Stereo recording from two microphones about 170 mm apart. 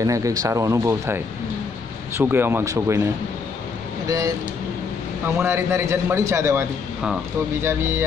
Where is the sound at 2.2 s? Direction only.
15° right (ahead or behind).